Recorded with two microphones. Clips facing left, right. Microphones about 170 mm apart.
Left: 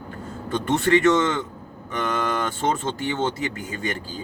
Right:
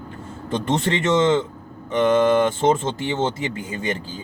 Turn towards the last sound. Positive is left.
turn(degrees=-25)  # may be behind; listen again after turning